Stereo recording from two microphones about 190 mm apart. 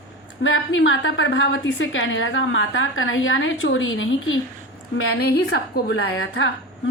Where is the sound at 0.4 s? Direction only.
90° left.